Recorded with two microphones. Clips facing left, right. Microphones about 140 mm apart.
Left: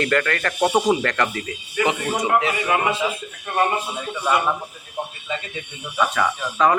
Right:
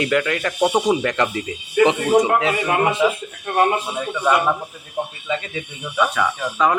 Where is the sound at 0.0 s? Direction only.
10° right (ahead or behind).